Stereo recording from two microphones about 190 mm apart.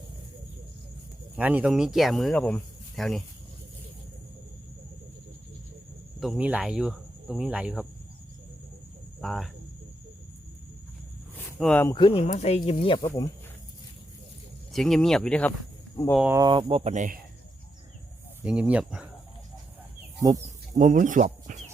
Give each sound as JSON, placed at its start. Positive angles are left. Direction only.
{"t": 1.4, "sound": "speech", "side_deg": -10}
{"t": 6.1, "sound": "speech", "side_deg": 0}
{"t": 9.2, "sound": "speech", "side_deg": 0}
{"t": 11.6, "sound": "speech", "side_deg": 10}
{"t": 11.9, "sound": "speech", "side_deg": 30}
{"t": 14.7, "sound": "speech", "side_deg": 0}
{"t": 16.3, "sound": "speech", "side_deg": -25}
{"t": 18.4, "sound": "speech", "side_deg": -5}
{"t": 20.1, "sound": "speech", "side_deg": -15}
{"t": 20.7, "sound": "speech", "side_deg": -40}